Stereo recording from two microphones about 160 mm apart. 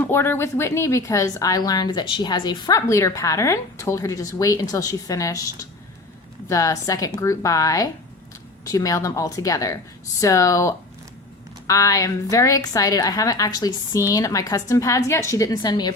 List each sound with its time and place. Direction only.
0.0 s speech: 15° left (ahead or behind)